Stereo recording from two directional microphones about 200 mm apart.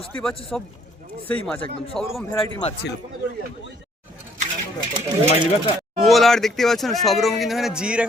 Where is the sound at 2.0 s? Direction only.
Centre (ahead or behind).